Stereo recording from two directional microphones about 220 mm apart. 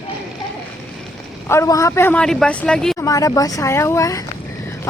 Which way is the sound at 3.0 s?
15° left (ahead or behind).